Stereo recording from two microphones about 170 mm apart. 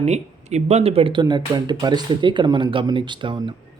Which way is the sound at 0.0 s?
40° right (ahead or behind).